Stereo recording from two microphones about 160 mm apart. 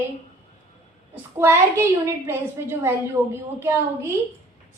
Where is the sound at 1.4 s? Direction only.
15° right (ahead or behind).